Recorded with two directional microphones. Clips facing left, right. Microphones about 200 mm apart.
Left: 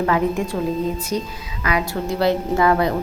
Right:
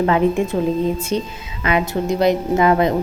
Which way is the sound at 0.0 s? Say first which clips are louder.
Right 3 dB; 25° right (ahead or behind).